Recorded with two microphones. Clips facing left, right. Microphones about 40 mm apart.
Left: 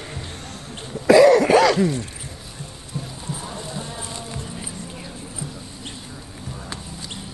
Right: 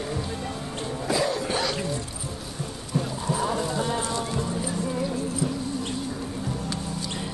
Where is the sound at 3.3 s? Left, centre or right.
Right.